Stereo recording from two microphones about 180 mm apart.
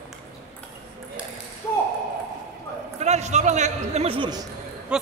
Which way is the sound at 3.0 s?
40° right (ahead or behind).